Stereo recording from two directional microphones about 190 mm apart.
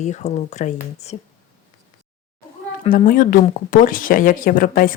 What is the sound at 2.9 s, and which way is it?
Speech, 45° left (ahead or behind).